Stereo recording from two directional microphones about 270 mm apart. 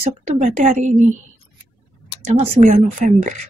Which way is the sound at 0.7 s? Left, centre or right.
Right.